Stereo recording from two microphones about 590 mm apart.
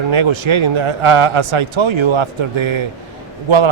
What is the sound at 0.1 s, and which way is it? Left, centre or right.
A man's voice, right.